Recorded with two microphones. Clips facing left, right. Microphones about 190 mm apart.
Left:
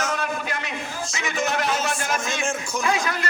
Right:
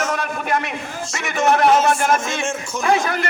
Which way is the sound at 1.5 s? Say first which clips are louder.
Right 13 dB; 60° right (ahead or behind).